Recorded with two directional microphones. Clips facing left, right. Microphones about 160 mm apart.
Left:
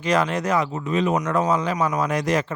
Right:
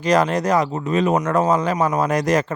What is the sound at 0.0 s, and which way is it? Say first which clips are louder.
Speech: right 4 dB; 40° right (ahead or behind).